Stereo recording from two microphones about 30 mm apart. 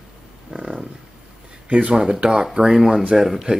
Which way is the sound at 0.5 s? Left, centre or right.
Right.